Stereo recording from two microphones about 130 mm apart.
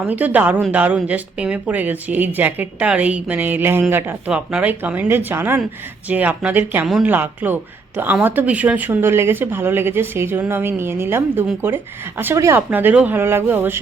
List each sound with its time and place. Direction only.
0.0 s a woman's voice: 10° right (ahead or behind)